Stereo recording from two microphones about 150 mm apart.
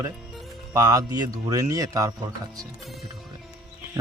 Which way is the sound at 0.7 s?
25° right (ahead or behind).